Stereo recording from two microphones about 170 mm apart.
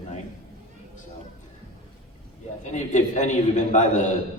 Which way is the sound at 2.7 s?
45° left (ahead or behind).